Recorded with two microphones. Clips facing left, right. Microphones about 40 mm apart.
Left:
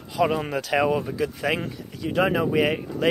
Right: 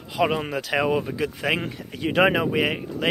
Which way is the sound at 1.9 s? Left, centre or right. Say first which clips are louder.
Right 3 dB; right.